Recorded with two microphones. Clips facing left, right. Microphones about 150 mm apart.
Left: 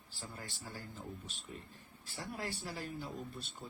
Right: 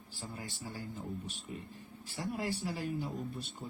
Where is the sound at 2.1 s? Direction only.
15° right (ahead or behind).